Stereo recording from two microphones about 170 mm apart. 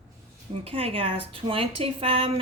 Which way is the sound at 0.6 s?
35° right (ahead or behind).